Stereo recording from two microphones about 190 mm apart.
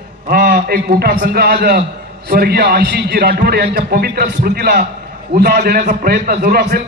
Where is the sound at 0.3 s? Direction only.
60° right (ahead or behind).